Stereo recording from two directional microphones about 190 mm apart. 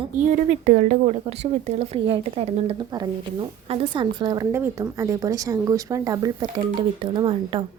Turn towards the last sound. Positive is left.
turn(degrees=-25)  # may be behind; listen again after turning